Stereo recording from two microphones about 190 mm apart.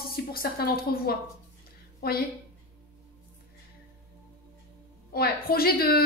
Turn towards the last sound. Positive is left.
turn(degrees=55)  # may be behind; listen again after turning